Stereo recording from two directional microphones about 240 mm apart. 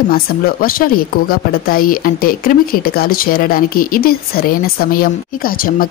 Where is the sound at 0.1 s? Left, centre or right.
Left.